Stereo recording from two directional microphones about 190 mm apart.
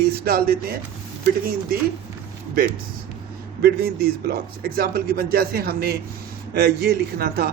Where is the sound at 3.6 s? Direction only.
55° right (ahead or behind).